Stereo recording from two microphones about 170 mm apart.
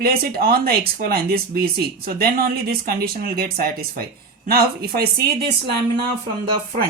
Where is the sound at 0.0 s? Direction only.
65° right (ahead or behind).